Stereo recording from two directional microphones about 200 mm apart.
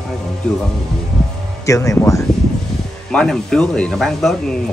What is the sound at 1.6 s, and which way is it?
Speech, 15° left (ahead or behind).